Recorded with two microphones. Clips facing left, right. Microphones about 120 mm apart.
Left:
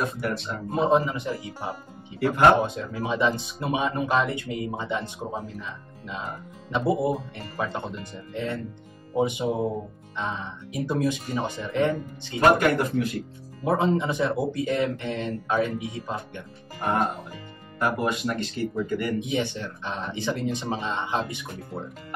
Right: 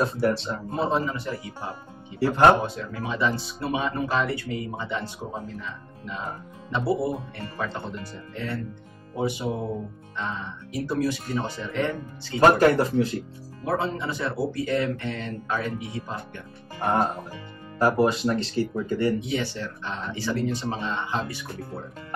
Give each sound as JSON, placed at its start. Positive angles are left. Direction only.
{"t": 0.0, "sound": "speech", "side_deg": -30}
{"t": 0.7, "sound": "speech", "side_deg": 15}
{"t": 2.1, "sound": "speech", "side_deg": -30}
{"t": 2.6, "sound": "speech", "side_deg": 20}
{"t": 6.7, "sound": "speech", "side_deg": 20}
{"t": 12.4, "sound": "speech", "side_deg": -35}
{"t": 13.7, "sound": "speech", "side_deg": 20}
{"t": 17.7, "sound": "speech", "side_deg": -35}
{"t": 19.1, "sound": "speech", "side_deg": 20}